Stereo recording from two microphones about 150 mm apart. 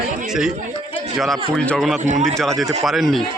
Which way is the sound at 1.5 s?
5° left (ahead or behind).